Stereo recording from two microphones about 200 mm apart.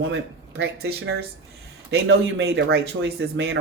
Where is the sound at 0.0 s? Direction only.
60° right (ahead or behind).